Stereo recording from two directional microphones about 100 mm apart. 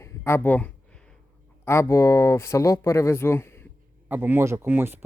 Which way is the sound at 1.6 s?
30° left (ahead or behind).